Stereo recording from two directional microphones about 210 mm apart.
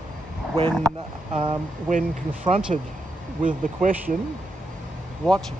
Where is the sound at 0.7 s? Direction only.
5° left (ahead or behind).